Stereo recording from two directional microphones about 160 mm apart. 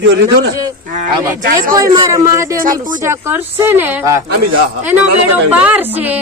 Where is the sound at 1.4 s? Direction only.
60° right (ahead or behind).